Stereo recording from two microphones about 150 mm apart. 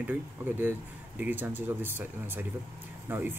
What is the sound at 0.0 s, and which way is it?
Speech, 10° right (ahead or behind).